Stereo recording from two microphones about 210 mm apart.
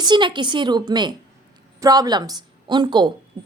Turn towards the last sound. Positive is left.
turn(degrees=-20)  # may be behind; listen again after turning